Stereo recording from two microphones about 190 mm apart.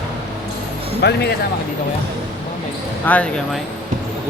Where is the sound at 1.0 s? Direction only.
60° left (ahead or behind).